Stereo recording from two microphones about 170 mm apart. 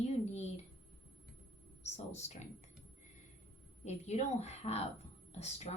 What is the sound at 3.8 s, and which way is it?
Speech, 40° left (ahead or behind).